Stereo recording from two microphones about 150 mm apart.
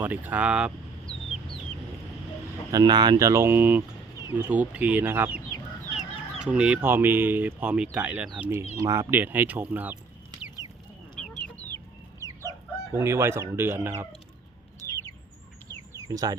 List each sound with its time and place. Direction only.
0.0 s speech: 10° right (ahead or behind)
2.7 s speech: 30° right (ahead or behind); by 9.9 s 10° right (ahead or behind)
11.1 s chicken: 5° left (ahead or behind)
12.2 s chicken: 20° left (ahead or behind)
12.9 s speech: 20° right (ahead or behind)
14.8 s bird: 20° right (ahead or behind)
15.9 s a sound: 25° right (ahead or behind)